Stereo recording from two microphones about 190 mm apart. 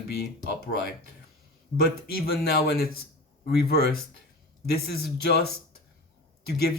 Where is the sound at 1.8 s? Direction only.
55° left (ahead or behind).